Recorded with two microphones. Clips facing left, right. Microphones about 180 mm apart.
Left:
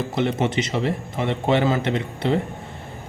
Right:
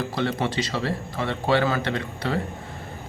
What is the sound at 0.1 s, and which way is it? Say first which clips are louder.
A man's voice: left 3 dB; 20° left (ahead or behind).